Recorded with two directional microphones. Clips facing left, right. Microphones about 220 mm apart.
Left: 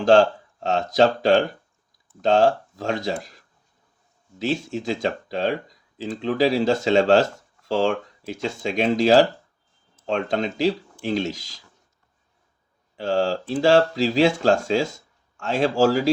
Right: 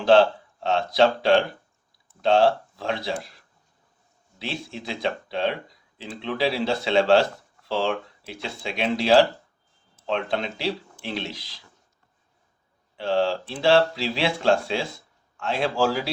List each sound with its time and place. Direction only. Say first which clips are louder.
0.0 s speech: left 1 dB; 45° left (ahead or behind)
4.4 s speech: left 8 dB; 45° left (ahead or behind)
10.2 s speech: left 5 dB; 45° left (ahead or behind)
13.0 s speech: left 1 dB; 45° left (ahead or behind)